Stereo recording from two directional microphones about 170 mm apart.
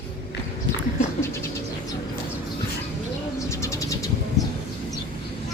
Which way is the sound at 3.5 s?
20° left (ahead or behind).